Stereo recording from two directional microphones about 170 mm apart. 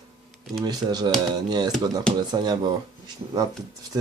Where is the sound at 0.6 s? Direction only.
25° right (ahead or behind).